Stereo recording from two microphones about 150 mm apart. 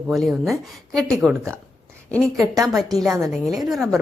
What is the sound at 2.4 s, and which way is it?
Speech, 25° right (ahead or behind).